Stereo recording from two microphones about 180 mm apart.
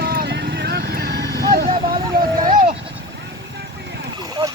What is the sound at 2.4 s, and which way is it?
Goat, 50° right (ahead or behind).